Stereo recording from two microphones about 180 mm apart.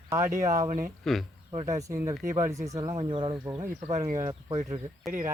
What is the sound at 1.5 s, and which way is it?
Speech, 20° right (ahead or behind).